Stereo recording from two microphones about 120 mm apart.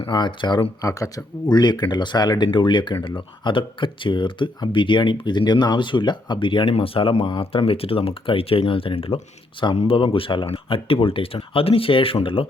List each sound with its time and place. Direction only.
0.0 s speech: 40° left (ahead or behind)
0.8 s speech: 25° left (ahead or behind); by 12.5 s 50° left (ahead or behind)